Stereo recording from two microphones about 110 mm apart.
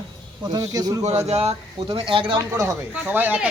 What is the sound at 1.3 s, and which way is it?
Speech, 70° right (ahead or behind).